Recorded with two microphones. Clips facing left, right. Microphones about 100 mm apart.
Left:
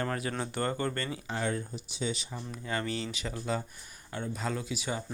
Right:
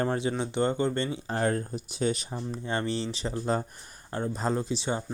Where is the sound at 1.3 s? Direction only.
45° right (ahead or behind).